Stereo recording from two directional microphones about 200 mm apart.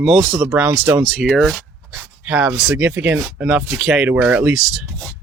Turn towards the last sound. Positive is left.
turn(degrees=0)  # may be behind; listen again after turning